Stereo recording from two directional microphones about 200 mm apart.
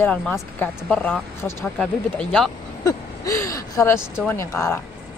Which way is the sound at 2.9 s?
15° left (ahead or behind).